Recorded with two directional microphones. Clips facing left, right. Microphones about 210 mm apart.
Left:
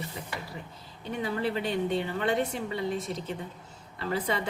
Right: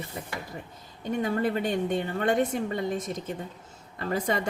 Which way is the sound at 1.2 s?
45° right (ahead or behind).